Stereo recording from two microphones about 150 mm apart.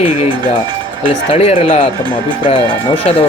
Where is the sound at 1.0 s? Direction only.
40° left (ahead or behind).